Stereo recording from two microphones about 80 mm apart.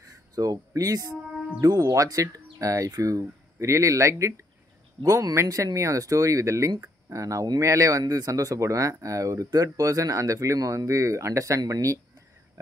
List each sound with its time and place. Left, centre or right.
0.3 s speech: right